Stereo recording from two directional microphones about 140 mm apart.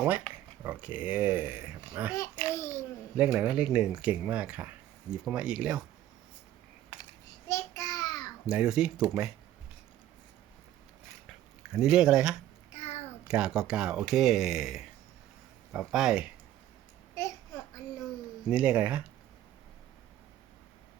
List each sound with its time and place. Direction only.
0.0 s speech: 10° right (ahead or behind)
2.6 s a child's voice: 20° left (ahead or behind)
3.2 s speech: 10° right (ahead or behind)
7.4 s child singing: 25° left (ahead or behind)
8.4 s speech: 5° right (ahead or behind)
11.7 s speech: 5° right (ahead or behind)
12.7 s a sound: 50° left (ahead or behind)
13.2 s speech: 5° right (ahead or behind)
18.4 s speech: 10° right (ahead or behind)